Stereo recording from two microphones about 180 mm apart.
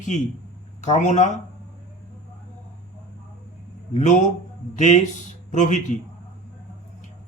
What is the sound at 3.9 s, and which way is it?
Speech, 40° left (ahead or behind).